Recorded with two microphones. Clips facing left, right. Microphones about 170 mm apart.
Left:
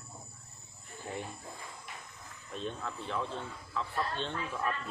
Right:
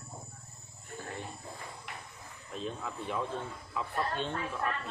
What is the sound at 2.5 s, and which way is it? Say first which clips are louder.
Speech: right 1 dB; 5° right (ahead or behind).